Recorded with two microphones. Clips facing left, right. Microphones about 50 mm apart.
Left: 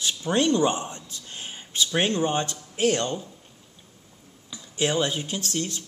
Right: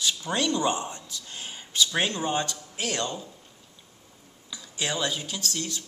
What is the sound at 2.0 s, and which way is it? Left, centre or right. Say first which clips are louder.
Speech: left 3 dB; left.